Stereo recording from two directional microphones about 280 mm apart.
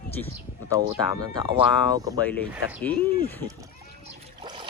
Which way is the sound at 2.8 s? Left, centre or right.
Centre.